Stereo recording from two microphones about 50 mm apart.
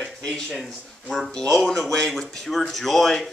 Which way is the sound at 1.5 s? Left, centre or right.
Centre.